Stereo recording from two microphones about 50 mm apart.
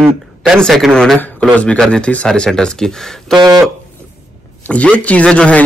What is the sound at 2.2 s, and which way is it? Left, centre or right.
Speech, centre.